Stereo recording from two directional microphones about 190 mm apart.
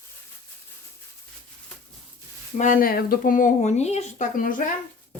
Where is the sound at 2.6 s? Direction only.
45° left (ahead or behind).